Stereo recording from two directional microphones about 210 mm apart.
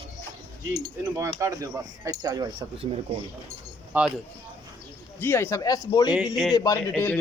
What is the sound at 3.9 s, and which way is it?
Speech, 5° right (ahead or behind).